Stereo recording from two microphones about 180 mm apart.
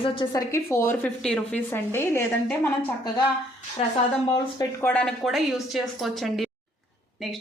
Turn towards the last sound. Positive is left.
turn(degrees=0)  # may be behind; listen again after turning